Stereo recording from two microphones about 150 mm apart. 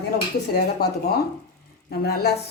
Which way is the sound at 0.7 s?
90° left.